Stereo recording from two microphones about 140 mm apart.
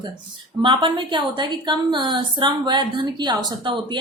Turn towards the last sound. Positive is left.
turn(degrees=-35)  # may be behind; listen again after turning